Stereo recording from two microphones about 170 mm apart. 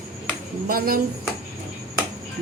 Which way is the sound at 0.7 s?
60° right (ahead or behind).